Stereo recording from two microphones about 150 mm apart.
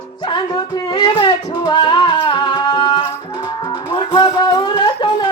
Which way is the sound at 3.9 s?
35° left (ahead or behind).